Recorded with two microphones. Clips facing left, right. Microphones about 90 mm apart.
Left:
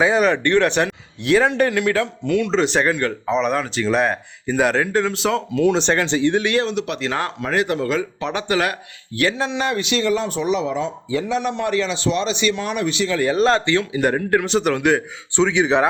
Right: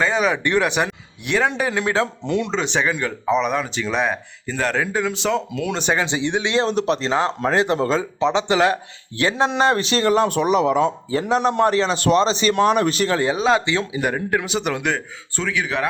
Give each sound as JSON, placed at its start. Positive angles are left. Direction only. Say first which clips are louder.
{"t": 0.0, "sound": "speech", "louder": "left 3 dB", "side_deg": 0}
{"t": 0.4, "sound": "speech", "louder": "left 2 dB", "side_deg": -10}
{"t": 1.7, "sound": "speech", "louder": "left 1 dB", "side_deg": -25}
{"t": 2.5, "sound": "speech", "louder": "left 3 dB", "side_deg": 0}
{"t": 4.4, "sound": "speech", "louder": "left 5 dB", "side_deg": 10}
{"t": 4.7, "sound": "speech", "louder": "left 3 dB", "side_deg": -5}
{"t": 6.0, "sound": "speech", "louder": "left 3 dB", "side_deg": -15}
{"t": 6.7, "sound": "a man's voice", "louder": "right 3 dB", "side_deg": -35}
{"t": 7.1, "sound": "speech", "louder": "right 3 dB", "side_deg": -20}
{"t": 11.1, "sound": "a man's voice", "louder": "right 2 dB", "side_deg": -40}
{"t": 13.3, "sound": "speech", "louder": "left 2 dB", "side_deg": -5}
{"t": 15.4, "sound": "speech", "louder": "left 7 dB", "side_deg": 20}